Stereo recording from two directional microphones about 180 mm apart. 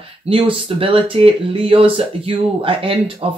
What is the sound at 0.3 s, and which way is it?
Speech, 30° right (ahead or behind).